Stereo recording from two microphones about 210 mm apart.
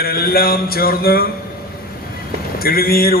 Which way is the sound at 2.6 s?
45° left (ahead or behind).